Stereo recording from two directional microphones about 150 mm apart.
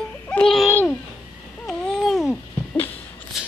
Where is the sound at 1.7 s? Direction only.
Centre (ahead or behind).